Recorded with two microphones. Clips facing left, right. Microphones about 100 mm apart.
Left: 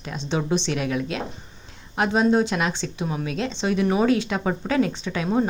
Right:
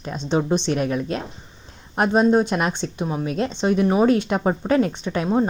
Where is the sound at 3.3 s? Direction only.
45° right (ahead or behind).